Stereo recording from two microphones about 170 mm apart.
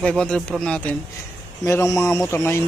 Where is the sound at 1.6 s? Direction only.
15° left (ahead or behind).